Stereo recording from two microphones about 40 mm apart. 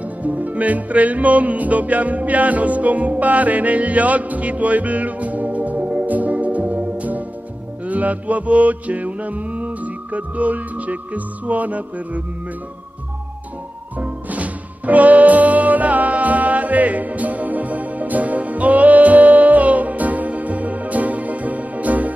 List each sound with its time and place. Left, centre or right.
0.2 s music: right
13.9 s music: right